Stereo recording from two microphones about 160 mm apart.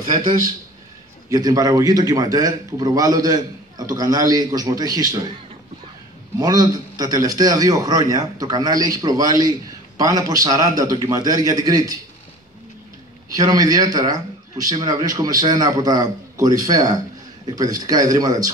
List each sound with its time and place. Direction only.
1.3 s a man's voice: 20° right (ahead or behind)
6.3 s a man's voice: 25° right (ahead or behind)
13.3 s a man's voice: 20° right (ahead or behind)